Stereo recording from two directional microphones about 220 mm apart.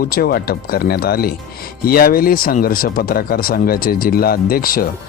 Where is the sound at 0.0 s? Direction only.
40° left (ahead or behind).